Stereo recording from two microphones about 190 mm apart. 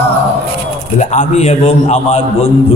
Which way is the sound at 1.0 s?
40° left (ahead or behind).